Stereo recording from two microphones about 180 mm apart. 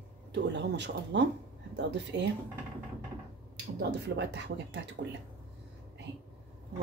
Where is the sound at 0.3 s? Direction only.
75° right (ahead or behind).